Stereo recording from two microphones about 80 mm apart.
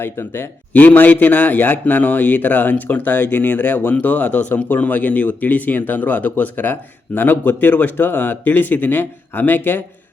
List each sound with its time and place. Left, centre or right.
0.0 s speech: left